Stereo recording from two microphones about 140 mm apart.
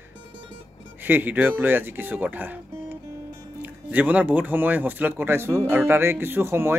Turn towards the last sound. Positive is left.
turn(degrees=-15)  # may be behind; listen again after turning